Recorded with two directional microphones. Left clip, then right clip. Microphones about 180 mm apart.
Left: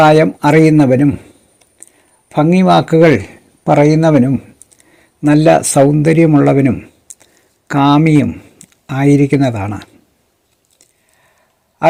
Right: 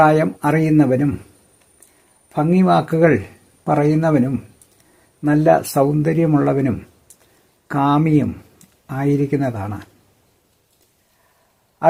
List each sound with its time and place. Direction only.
0.0 s a man's voice: 15° left (ahead or behind)
2.3 s a man's voice: 15° left (ahead or behind)